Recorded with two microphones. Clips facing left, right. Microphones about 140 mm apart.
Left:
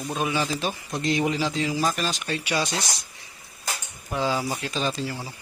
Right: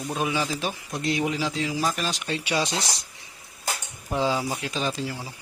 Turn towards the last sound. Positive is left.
turn(degrees=-10)  # may be behind; listen again after turning